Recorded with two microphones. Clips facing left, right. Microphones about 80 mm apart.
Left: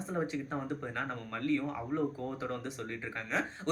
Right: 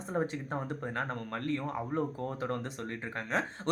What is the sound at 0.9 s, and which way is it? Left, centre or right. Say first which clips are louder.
A man's voice: right 2 dB; right.